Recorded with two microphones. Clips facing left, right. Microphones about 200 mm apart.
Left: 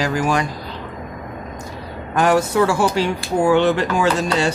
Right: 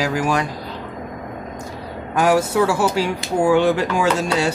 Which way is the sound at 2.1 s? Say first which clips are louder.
Even; 5° right (ahead or behind).